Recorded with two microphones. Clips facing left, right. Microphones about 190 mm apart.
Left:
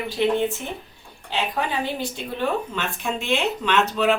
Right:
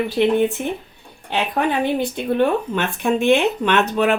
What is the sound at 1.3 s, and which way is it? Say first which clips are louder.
Speech: right 5 dB; 55° right (ahead or behind).